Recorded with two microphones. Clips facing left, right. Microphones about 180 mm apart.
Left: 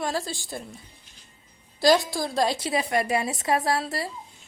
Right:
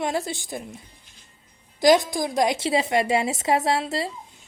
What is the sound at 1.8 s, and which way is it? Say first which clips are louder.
A woman's voice: right 3 dB; 20° right (ahead or behind).